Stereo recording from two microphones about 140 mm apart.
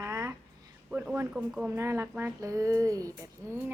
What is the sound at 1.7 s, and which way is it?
A woman's voice, 20° right (ahead or behind).